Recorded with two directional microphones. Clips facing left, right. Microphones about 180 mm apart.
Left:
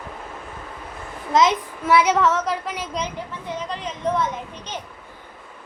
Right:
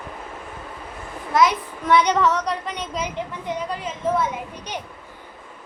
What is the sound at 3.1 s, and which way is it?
A child's voice, 15° right (ahead or behind).